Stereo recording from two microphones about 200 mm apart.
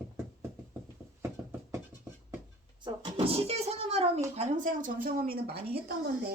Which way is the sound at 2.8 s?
25° right (ahead or behind).